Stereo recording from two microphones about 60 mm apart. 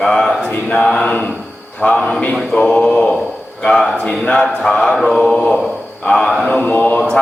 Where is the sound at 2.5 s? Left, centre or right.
Centre.